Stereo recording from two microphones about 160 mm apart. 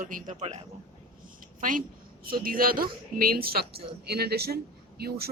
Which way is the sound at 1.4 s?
60° right (ahead or behind).